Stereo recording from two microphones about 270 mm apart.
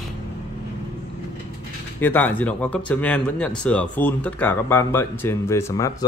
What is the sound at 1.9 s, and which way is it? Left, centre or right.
Speech, centre.